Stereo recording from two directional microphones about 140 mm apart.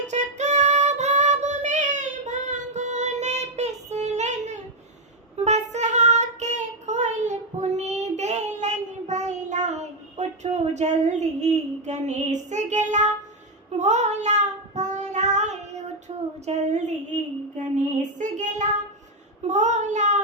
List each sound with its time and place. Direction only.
0.1 s music: 55° right (ahead or behind)
5.4 s child singing: 55° right (ahead or behind)
17.7 s music: 60° right (ahead or behind)
19.5 s child singing: 60° right (ahead or behind)